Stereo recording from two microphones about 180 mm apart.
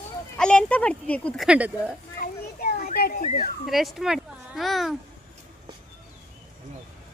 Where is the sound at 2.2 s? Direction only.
50° left (ahead or behind).